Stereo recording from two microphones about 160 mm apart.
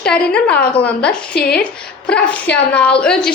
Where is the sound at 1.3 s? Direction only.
90° left.